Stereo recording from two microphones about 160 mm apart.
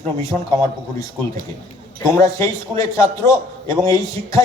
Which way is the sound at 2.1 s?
20° left (ahead or behind).